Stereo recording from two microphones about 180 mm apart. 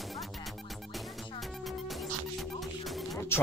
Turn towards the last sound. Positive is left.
turn(degrees=0)  # may be behind; listen again after turning